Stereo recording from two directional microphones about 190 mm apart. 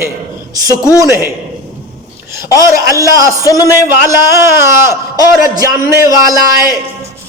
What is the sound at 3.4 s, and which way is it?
Speech, 20° left (ahead or behind).